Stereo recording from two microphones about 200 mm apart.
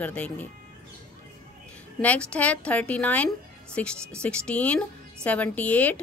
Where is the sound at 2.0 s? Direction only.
5° left (ahead or behind).